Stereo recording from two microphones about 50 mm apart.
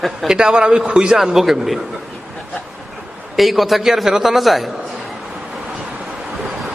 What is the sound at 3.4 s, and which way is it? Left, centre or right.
A man's voice, centre.